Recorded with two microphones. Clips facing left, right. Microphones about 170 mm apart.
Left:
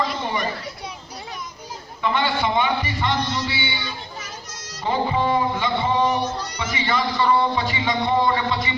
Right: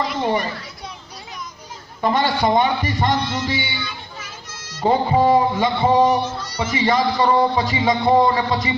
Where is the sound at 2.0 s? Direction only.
40° right (ahead or behind).